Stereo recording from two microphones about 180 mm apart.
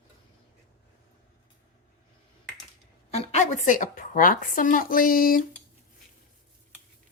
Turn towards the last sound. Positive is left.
turn(degrees=50)  # may be behind; listen again after turning